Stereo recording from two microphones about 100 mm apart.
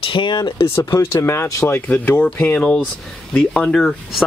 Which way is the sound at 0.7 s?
25° left (ahead or behind).